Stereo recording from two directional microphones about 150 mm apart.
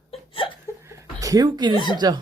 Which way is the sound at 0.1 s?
35° left (ahead or behind).